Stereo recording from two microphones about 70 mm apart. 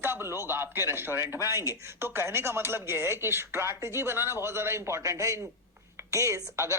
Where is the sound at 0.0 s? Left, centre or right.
Right.